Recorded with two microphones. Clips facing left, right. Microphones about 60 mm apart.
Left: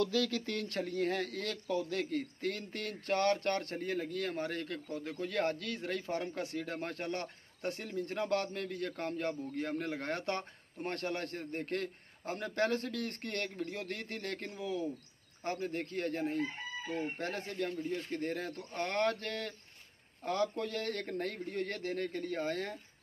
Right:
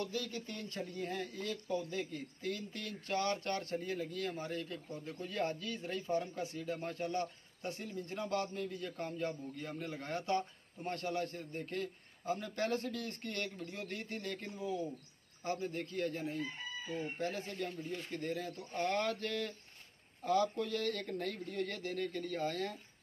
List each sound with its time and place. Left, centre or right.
0.1 s speech: left
15.4 s speech: left